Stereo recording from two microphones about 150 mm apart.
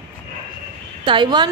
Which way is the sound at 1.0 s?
30° right (ahead or behind).